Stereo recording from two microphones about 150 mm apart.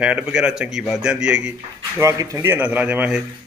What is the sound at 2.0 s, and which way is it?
Speech, 20° right (ahead or behind).